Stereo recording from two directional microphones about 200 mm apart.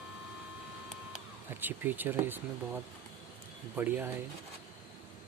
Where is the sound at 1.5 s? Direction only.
10° right (ahead or behind).